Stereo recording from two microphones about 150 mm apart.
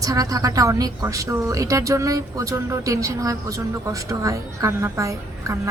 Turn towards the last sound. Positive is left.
turn(degrees=-20)  # may be behind; listen again after turning